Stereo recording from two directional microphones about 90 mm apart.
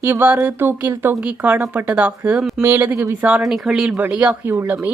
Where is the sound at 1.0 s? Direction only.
20° right (ahead or behind).